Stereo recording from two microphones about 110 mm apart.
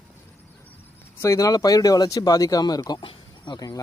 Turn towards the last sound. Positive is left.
turn(degrees=40)  # may be behind; listen again after turning